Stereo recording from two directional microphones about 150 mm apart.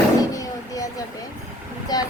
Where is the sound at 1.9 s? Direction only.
25° left (ahead or behind).